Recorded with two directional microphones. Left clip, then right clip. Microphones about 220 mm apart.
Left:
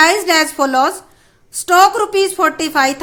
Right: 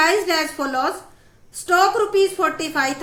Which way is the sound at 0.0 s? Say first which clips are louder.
Left 6 dB; 45° left (ahead or behind).